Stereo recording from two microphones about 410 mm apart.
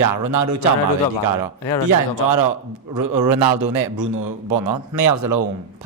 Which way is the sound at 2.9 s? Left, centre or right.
Right.